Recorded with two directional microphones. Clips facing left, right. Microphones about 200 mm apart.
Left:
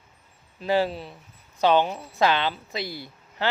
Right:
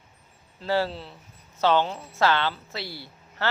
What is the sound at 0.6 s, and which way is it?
Speech, 15° left (ahead or behind).